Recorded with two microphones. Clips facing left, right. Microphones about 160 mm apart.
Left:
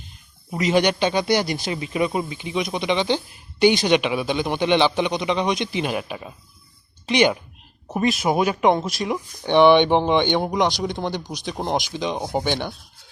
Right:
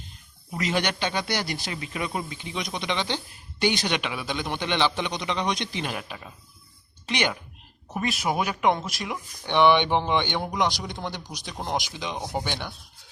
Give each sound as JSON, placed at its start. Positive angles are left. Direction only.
{"t": 0.5, "sound": "a man's voice", "side_deg": 15}
{"t": 7.9, "sound": "speech", "side_deg": 30}